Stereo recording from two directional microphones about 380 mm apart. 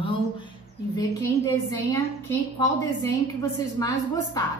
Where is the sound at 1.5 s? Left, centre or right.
Centre.